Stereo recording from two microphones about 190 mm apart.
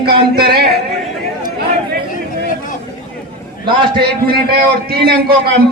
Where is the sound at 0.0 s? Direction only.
55° right (ahead or behind).